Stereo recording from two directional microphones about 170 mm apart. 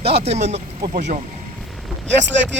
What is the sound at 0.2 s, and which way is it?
Speech, 40° right (ahead or behind).